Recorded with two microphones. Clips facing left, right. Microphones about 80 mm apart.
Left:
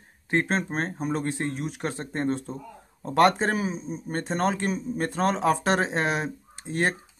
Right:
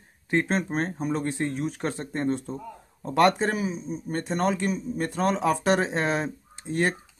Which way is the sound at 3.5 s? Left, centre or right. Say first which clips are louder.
Left 1 dB; left.